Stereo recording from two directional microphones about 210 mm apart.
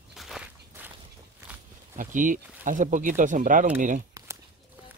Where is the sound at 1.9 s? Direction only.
40° right (ahead or behind).